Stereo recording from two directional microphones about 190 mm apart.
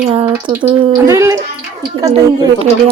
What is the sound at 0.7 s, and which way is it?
Speech, 15° right (ahead or behind).